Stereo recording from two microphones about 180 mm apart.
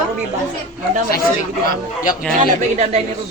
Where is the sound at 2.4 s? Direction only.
35° right (ahead or behind).